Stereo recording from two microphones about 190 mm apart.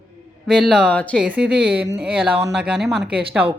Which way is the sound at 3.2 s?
30° right (ahead or behind).